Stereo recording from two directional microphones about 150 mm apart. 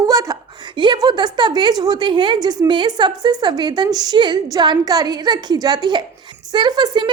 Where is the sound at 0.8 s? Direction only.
30° right (ahead or behind).